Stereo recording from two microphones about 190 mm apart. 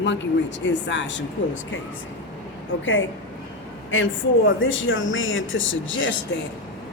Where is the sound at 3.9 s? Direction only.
90° left.